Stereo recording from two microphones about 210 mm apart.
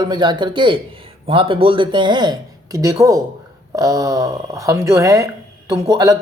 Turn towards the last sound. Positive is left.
turn(degrees=-20)  # may be behind; listen again after turning